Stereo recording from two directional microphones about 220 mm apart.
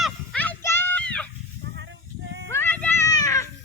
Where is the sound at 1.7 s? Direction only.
55° right (ahead or behind).